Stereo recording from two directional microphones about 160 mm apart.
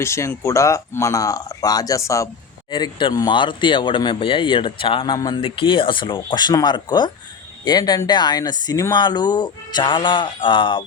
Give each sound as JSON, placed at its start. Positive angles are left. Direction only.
{"t": 0.0, "sound": "speech", "side_deg": 15}